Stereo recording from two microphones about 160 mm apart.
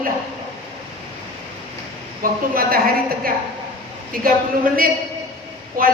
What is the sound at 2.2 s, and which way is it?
A woman's voice, 60° right (ahead or behind).